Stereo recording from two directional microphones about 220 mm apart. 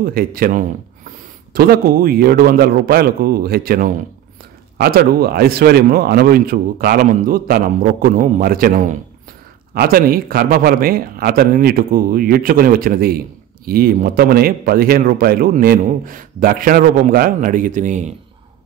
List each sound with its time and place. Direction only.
0.0 s a man's voice: 40° right (ahead or behind)